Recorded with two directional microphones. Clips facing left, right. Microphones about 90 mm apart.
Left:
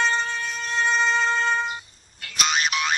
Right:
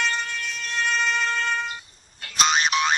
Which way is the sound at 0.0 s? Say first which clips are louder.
Left 3 dB; 30° left (ahead or behind).